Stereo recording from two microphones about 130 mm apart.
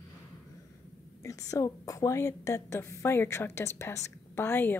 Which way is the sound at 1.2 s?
25° left (ahead or behind).